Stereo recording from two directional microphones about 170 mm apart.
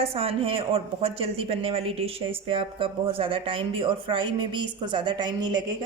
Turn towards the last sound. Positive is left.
turn(degrees=-25)  # may be behind; listen again after turning